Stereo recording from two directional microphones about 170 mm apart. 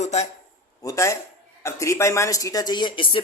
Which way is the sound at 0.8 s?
15° left (ahead or behind).